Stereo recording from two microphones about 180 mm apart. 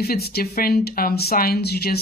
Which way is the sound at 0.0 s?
60° left (ahead or behind).